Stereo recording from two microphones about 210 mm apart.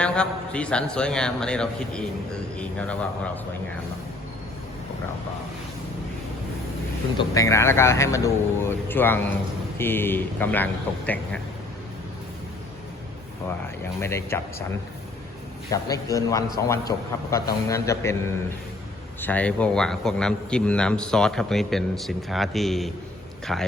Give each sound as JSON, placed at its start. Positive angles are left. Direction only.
{"t": 0.0, "sound": "a man's voice", "side_deg": 5}
{"t": 7.2, "sound": "speech", "side_deg": 15}
{"t": 14.0, "sound": "speech", "side_deg": 10}
{"t": 15.7, "sound": "speech", "side_deg": 15}
{"t": 19.2, "sound": "a man's voice", "side_deg": 5}